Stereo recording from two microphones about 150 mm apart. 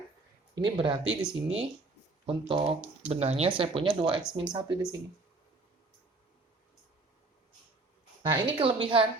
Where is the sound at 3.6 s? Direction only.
35° right (ahead or behind).